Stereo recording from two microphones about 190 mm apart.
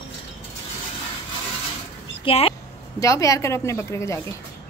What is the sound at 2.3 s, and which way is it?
Speech, 30° left (ahead or behind).